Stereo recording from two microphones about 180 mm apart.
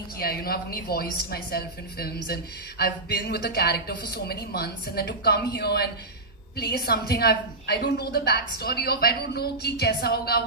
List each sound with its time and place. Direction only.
0.2 s a woman's voice: 55° left (ahead or behind)